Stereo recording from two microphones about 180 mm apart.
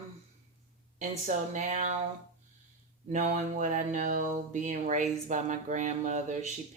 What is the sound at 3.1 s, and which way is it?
Speech, 45° right (ahead or behind).